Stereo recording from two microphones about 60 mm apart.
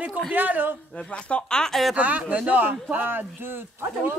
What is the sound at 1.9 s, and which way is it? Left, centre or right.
Speech, right.